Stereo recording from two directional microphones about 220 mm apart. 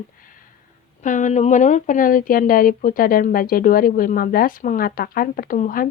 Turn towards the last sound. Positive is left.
turn(degrees=35)  # may be behind; listen again after turning